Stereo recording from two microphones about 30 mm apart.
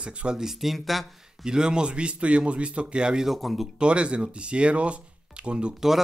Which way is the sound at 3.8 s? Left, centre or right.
Right.